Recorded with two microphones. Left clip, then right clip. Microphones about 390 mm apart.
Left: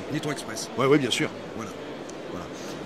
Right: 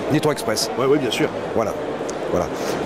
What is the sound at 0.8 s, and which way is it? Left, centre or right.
Speech, left.